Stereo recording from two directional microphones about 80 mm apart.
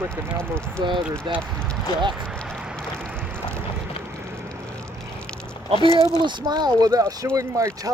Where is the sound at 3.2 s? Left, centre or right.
Right.